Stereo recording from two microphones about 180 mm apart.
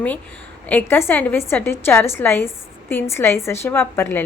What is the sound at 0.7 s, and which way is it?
A woman's voice, 10° left (ahead or behind).